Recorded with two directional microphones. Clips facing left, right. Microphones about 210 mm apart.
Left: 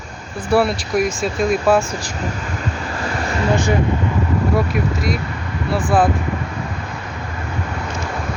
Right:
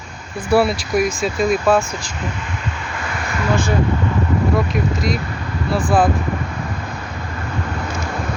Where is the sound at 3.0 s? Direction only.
35° left (ahead or behind).